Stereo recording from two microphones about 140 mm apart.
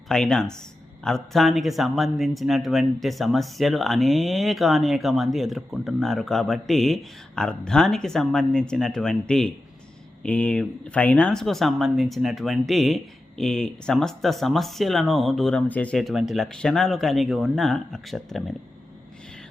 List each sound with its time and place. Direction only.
0.1 s speech: 5° left (ahead or behind)